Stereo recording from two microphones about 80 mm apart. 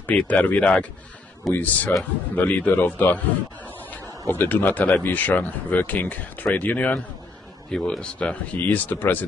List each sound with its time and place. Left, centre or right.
0.0 s speech: centre
4.3 s speech: left
7.7 s speech: centre; by 9.2 s left